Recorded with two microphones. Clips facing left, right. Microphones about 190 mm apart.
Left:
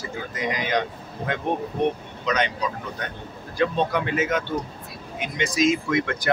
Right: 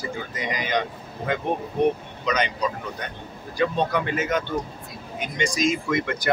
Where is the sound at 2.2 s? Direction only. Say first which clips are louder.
Even; centre (ahead or behind).